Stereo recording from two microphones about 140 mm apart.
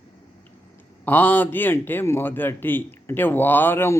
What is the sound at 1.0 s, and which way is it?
A man's voice, 15° left (ahead or behind).